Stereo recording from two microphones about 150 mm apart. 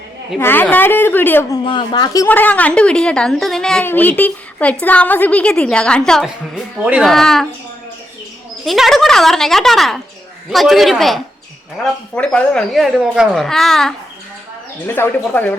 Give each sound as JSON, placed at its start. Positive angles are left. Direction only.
{"t": 0.3, "sound": "a woman's voice", "side_deg": 15}
{"t": 1.6, "sound": "speech", "side_deg": 30}
{"t": 2.2, "sound": "a woman's voice", "side_deg": 10}
{"t": 8.6, "sound": "a woman's voice", "side_deg": 0}
{"t": 14.8, "sound": "a woman's voice", "side_deg": 15}